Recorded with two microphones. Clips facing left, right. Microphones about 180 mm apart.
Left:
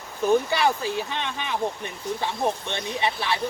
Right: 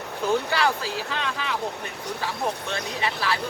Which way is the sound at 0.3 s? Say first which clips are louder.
Left 3 dB; 15° left (ahead or behind).